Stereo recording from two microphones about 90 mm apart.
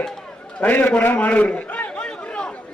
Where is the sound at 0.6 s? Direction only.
20° left (ahead or behind).